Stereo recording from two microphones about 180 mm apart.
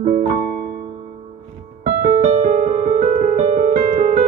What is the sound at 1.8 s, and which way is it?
Music, 55° right (ahead or behind).